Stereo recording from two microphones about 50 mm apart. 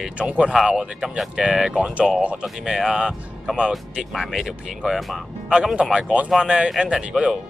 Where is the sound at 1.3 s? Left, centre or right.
Centre.